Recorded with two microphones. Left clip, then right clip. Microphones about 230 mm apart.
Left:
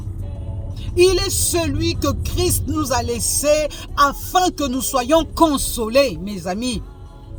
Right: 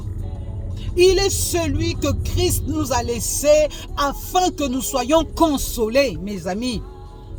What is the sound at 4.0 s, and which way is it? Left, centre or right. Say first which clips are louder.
Speech: left 3 dB; centre.